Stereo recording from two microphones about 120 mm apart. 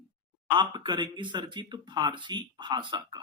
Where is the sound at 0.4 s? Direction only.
40° right (ahead or behind).